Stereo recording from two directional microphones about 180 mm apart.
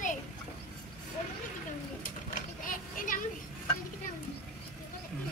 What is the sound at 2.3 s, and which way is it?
Children playing, 45° left (ahead or behind).